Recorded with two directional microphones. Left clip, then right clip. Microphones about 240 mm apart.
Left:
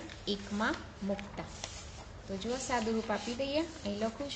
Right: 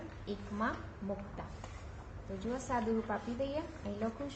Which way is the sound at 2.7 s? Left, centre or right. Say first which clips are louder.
Left 2 dB; left.